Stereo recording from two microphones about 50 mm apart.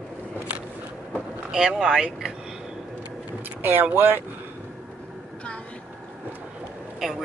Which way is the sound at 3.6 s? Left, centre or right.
Right.